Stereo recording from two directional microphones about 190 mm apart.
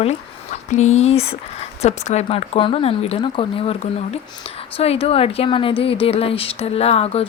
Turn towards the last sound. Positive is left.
turn(degrees=30)  # may be behind; listen again after turning